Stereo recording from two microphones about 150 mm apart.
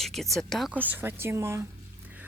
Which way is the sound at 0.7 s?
10° right (ahead or behind).